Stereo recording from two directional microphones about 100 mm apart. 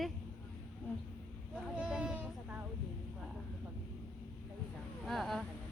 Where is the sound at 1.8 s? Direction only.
10° right (ahead or behind).